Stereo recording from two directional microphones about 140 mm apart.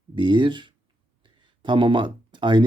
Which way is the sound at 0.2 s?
35° right (ahead or behind).